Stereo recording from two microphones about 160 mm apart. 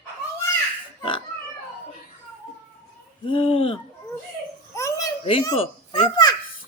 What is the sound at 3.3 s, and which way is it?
Hoot, 35° left (ahead or behind).